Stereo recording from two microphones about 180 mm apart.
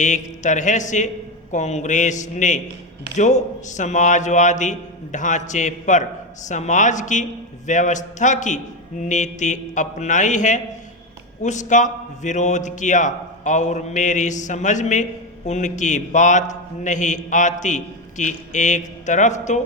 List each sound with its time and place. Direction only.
0.0 s a man's voice: 45° left (ahead or behind)